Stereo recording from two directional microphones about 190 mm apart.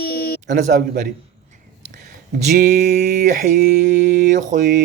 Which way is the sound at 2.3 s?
45° right (ahead or behind).